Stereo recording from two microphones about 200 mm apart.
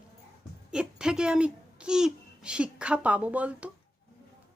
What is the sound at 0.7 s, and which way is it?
A child's voice, 5° right (ahead or behind).